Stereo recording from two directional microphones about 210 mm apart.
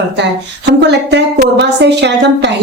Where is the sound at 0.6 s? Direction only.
55° right (ahead or behind).